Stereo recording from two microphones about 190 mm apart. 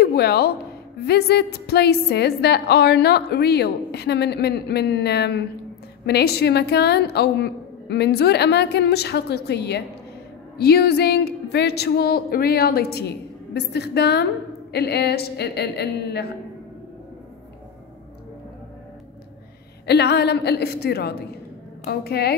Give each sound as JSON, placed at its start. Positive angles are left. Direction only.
{"t": 0.0, "sound": "a woman's voice", "side_deg": 55}
{"t": 19.9, "sound": "a woman's voice", "side_deg": 60}